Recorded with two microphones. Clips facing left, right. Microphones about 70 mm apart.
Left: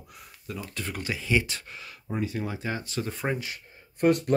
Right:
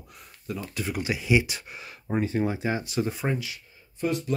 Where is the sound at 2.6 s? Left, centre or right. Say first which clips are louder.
Right 4 dB; centre.